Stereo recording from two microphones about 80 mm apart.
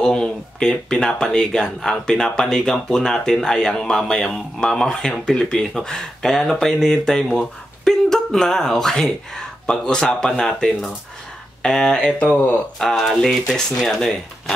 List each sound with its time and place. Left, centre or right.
0.0 s speech: centre
12.7 s speech: centre